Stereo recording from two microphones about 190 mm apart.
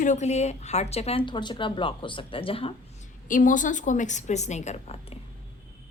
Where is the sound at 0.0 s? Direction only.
40° left (ahead or behind).